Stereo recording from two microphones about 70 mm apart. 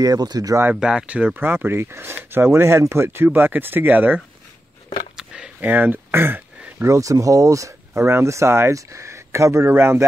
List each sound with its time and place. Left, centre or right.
0.0 s speech: right
0.7 s speech: centre
5.1 s a sound: centre
5.6 s speech: right
6.8 s speech: right
8.0 s speech: right